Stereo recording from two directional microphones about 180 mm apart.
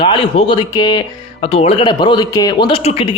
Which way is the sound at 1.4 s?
35° left (ahead or behind).